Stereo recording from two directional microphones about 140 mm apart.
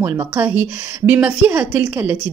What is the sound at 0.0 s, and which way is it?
A woman's voice, 15° right (ahead or behind).